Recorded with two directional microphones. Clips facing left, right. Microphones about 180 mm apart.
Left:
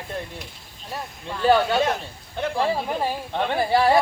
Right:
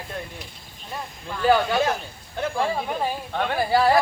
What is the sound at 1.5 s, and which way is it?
Speech, centre (ahead or behind).